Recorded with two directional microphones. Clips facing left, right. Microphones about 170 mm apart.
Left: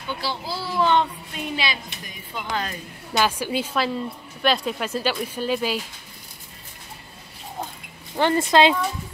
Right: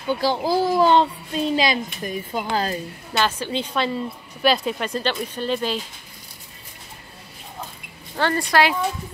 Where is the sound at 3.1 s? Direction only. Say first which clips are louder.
Left 1 dB; 10° left (ahead or behind).